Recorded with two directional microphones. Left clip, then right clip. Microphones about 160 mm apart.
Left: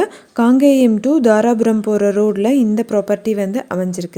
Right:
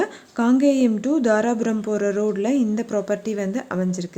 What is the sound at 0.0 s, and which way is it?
Speech, 40° left (ahead or behind).